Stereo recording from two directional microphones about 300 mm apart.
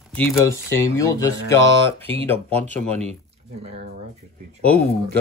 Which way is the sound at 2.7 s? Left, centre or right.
Centre.